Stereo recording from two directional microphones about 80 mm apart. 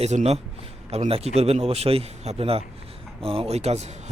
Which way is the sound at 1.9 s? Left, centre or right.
Right.